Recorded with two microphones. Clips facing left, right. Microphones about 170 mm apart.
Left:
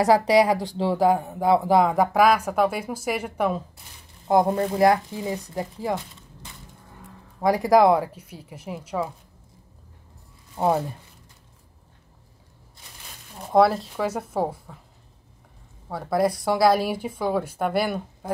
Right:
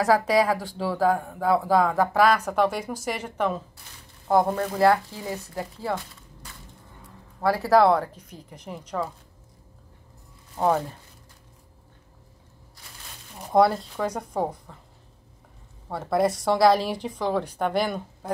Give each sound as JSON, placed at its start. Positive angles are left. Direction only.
{"t": 0.3, "sound": "speech", "side_deg": 20}
{"t": 7.4, "sound": "speech", "side_deg": 15}
{"t": 10.6, "sound": "speech", "side_deg": 15}
{"t": 13.5, "sound": "speech", "side_deg": 0}
{"t": 15.9, "sound": "speech", "side_deg": 0}